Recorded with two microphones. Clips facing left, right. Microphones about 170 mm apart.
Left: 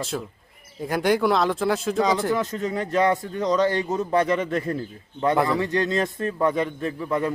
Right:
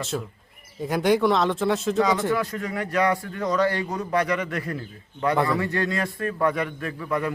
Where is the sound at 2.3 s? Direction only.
20° left (ahead or behind).